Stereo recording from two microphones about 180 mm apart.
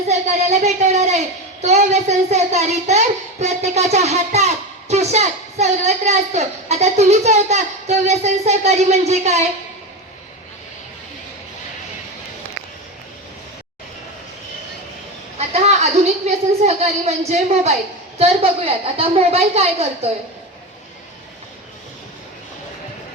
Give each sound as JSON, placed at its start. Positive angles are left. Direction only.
{"t": 0.1, "sound": "a child's voice", "side_deg": -40}
{"t": 15.4, "sound": "a child's voice", "side_deg": -35}